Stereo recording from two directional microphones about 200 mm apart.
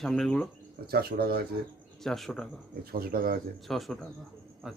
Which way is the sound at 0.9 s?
50° right (ahead or behind).